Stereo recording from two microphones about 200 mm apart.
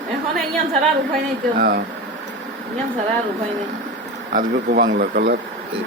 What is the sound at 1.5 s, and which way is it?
Speech, 45° right (ahead or behind).